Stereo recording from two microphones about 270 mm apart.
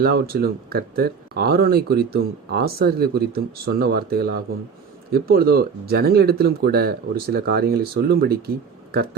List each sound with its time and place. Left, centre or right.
0.0 s speech: right